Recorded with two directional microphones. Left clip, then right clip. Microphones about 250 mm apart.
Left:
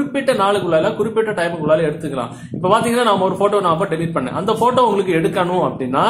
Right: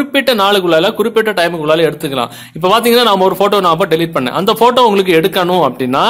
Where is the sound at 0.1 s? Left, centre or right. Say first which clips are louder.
Right 6 dB; right.